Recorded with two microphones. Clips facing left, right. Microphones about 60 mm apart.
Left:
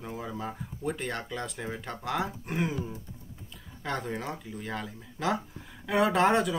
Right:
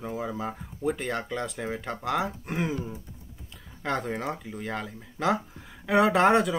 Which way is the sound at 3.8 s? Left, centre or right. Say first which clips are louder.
Right 4 dB; centre.